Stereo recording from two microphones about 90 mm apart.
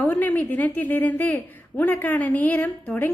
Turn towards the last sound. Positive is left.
turn(degrees=20)  # may be behind; listen again after turning